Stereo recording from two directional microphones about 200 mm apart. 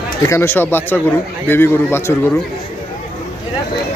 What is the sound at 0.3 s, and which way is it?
A man's voice, 10° left (ahead or behind).